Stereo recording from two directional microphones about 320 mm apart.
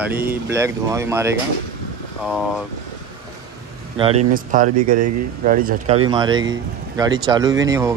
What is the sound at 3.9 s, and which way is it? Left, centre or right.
Speech, centre.